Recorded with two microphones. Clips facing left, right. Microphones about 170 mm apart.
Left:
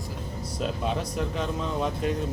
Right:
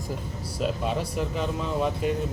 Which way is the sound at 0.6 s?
Centre (ahead or behind).